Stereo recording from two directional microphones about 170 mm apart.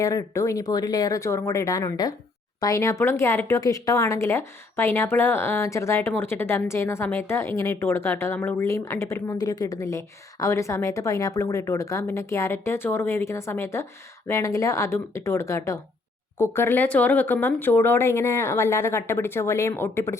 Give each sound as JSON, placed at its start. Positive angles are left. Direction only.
{"t": 0.0, "sound": "speech", "side_deg": 20}